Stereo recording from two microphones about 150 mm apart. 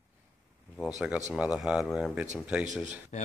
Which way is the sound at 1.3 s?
5° right (ahead or behind).